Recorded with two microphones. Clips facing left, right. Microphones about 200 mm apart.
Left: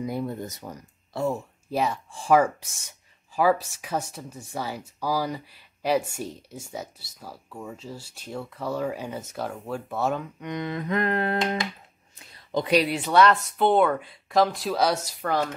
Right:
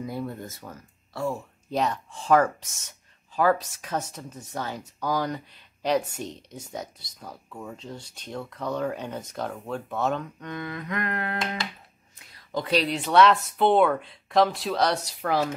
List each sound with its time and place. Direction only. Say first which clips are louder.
0.0 s speech: left 3 dB; 15° left (ahead or behind)
1.7 s speech: even; 5° left (ahead or behind)
13.1 s speech: right 1 dB; centre (ahead or behind)